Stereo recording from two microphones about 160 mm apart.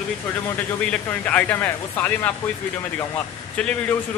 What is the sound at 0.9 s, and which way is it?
Speech, 10° left (ahead or behind).